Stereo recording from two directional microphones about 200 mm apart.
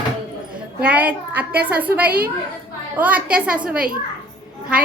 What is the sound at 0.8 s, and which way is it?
A child's voice, 5° right (ahead or behind).